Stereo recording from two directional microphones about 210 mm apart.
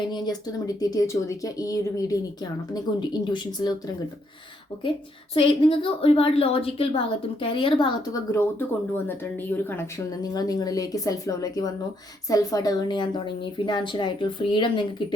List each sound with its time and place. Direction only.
0.1 s a woman's voice: 20° left (ahead or behind)
4.8 s a woman's voice: 25° left (ahead or behind)